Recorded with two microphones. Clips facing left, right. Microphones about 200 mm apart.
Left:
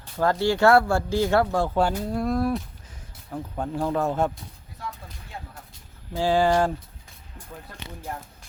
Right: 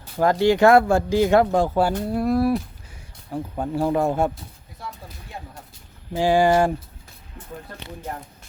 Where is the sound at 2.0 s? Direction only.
5° right (ahead or behind).